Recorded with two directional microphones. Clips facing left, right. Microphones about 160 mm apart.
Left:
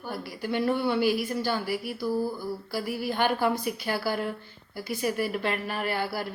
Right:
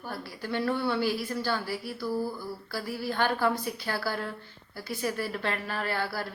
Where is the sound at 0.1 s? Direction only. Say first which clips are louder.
Left 3 dB; 15° left (ahead or behind).